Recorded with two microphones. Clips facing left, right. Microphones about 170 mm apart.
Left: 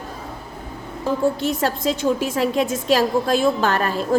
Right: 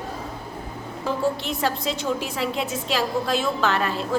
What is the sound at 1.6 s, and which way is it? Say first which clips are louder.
A woman's voice: left 3 dB; 50° left (ahead or behind).